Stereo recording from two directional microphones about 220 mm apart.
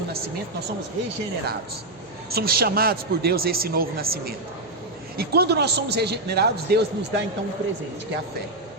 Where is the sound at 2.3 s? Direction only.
45° right (ahead or behind).